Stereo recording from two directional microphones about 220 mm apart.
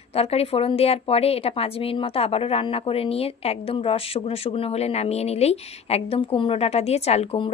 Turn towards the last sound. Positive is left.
turn(degrees=25)  # may be behind; listen again after turning